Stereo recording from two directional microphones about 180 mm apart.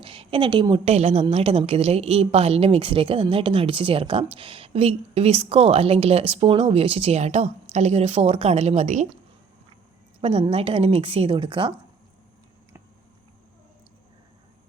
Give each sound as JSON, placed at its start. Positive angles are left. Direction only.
{"t": 0.0, "sound": "a sound", "side_deg": -30}
{"t": 0.9, "sound": "a woman's voice", "side_deg": -35}
{"t": 10.2, "sound": "a woman's voice", "side_deg": -35}